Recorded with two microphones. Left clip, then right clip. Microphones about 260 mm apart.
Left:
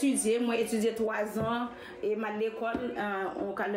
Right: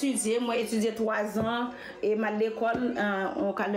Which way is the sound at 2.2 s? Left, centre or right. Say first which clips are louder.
Right 4 dB; right.